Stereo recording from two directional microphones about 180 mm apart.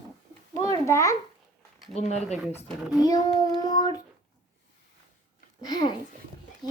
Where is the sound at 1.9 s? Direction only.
40° left (ahead or behind).